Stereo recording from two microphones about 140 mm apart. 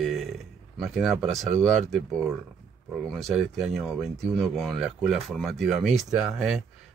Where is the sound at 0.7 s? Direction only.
Centre (ahead or behind).